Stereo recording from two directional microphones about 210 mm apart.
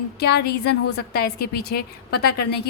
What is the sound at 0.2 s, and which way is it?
Speech, 50° left (ahead or behind).